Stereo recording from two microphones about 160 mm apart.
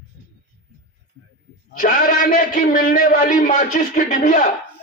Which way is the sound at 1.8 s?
60° left (ahead or behind).